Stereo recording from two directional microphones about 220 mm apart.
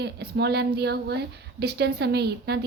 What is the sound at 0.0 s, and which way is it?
A woman's voice, 50° right (ahead or behind).